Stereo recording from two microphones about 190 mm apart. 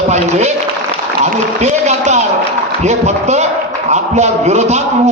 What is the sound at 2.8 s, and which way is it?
A man's voice, 35° right (ahead or behind).